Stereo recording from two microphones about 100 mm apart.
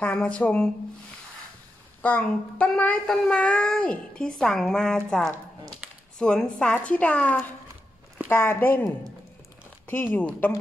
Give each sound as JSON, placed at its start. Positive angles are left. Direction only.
{"t": 0.0, "sound": "child singing", "side_deg": 15}
{"t": 2.0, "sound": "child singing", "side_deg": 15}
{"t": 8.3, "sound": "speech", "side_deg": 20}
{"t": 9.8, "sound": "speech", "side_deg": 20}